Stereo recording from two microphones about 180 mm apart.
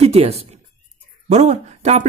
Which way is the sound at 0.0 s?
35° right (ahead or behind).